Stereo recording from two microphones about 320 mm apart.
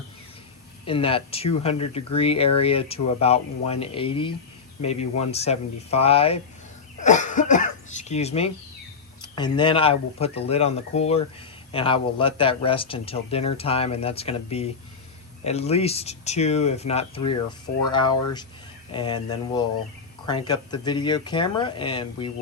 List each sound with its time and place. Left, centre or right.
0.9 s speech: centre
7.0 s cough: left
9.2 s speech: centre